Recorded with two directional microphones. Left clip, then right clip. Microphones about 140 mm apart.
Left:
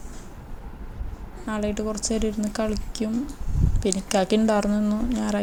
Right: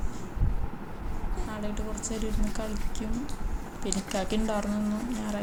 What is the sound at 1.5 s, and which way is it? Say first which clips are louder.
Speech: left 11 dB; 40° left (ahead or behind).